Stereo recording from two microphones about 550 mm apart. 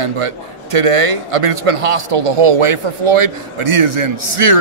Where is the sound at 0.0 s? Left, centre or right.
Right.